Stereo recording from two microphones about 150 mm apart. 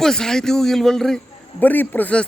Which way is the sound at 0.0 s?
5° left (ahead or behind).